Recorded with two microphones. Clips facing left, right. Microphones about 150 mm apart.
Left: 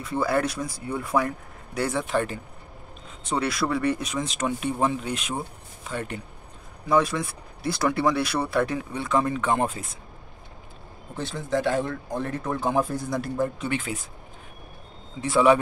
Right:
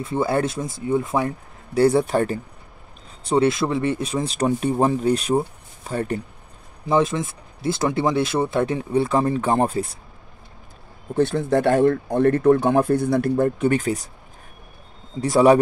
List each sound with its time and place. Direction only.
0.0 s speech: 25° right (ahead or behind)
3.3 s speech: 25° right (ahead or behind)
6.9 s speech: 25° right (ahead or behind)
11.1 s speech: 60° right (ahead or behind)
13.7 s speech: 40° right (ahead or behind)
15.1 s speech: 40° right (ahead or behind)